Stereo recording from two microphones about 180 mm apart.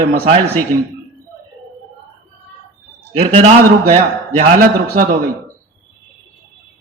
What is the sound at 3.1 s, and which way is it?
A man's voice, 40° right (ahead or behind).